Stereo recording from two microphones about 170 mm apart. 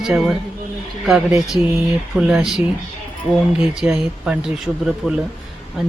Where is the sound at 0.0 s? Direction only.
5° right (ahead or behind).